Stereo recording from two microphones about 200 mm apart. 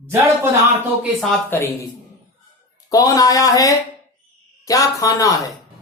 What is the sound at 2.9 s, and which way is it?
Speech, 20° left (ahead or behind).